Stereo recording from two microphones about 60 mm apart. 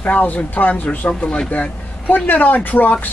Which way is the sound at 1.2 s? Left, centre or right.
Centre.